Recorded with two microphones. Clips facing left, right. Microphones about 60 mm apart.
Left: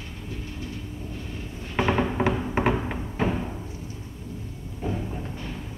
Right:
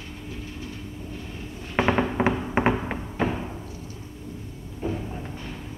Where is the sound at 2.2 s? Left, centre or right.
Centre.